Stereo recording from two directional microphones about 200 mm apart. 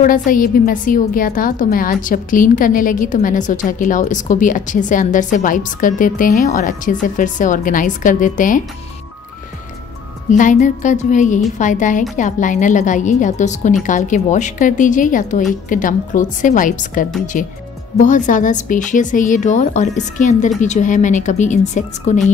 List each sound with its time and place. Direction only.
0.0 s a woman's voice: 40° left (ahead or behind)
10.3 s a woman's voice: 40° left (ahead or behind)